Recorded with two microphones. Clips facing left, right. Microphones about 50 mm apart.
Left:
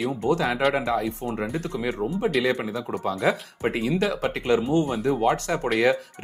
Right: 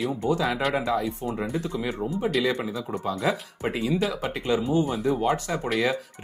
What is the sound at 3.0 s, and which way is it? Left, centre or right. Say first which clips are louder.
Speech: left 3 dB; left.